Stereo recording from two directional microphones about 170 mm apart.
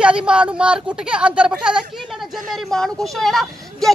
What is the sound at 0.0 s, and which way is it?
Speech, 5° right (ahead or behind).